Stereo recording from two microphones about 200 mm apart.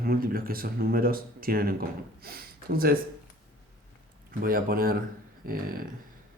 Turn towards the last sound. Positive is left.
turn(degrees=-45)  # may be behind; listen again after turning